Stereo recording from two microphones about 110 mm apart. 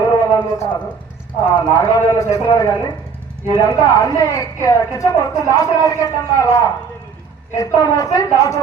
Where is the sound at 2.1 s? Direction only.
30° left (ahead or behind).